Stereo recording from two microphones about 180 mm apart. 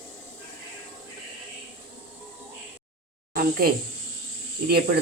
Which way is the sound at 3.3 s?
55° right (ahead or behind).